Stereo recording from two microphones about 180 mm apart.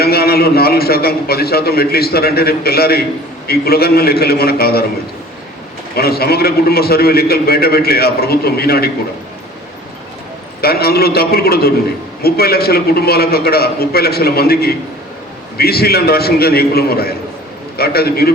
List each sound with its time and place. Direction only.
0.0 s a man's voice: 60° left (ahead or behind)
5.9 s a man's voice: 60° left (ahead or behind)
10.6 s a man's voice: 60° left (ahead or behind)